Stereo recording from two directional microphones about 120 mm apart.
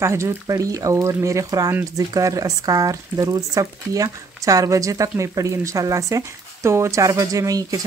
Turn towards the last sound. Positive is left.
turn(degrees=-30)  # may be behind; listen again after turning